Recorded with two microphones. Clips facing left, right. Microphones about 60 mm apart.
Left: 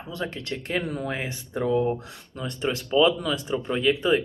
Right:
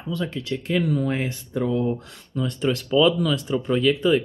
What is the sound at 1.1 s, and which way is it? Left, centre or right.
Speech, left.